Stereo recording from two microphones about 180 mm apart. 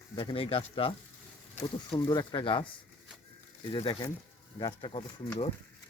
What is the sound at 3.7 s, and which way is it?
Speech, 25° left (ahead or behind).